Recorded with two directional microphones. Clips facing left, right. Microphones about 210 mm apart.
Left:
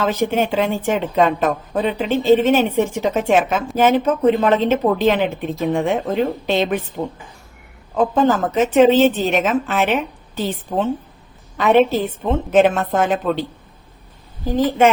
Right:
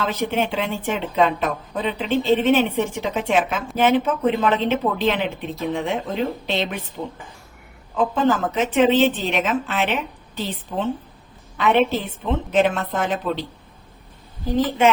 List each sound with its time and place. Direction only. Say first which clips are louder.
0.0 s a woman's voice: left 4 dB; 45° left (ahead or behind)